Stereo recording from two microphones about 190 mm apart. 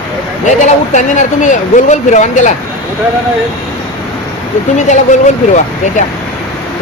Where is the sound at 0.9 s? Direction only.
40° left (ahead or behind).